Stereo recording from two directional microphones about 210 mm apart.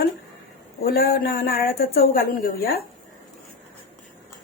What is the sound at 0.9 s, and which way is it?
A woman's voice, 45° left (ahead or behind).